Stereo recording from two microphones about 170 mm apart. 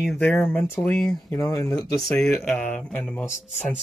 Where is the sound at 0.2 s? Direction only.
10° left (ahead or behind).